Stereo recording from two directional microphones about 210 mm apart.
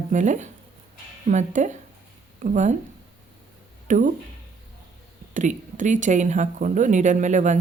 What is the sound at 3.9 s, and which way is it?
Speech, 35° right (ahead or behind).